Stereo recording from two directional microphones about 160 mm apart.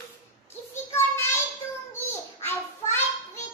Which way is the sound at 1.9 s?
15° left (ahead or behind).